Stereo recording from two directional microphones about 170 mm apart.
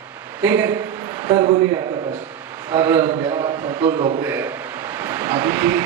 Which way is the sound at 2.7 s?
15° right (ahead or behind).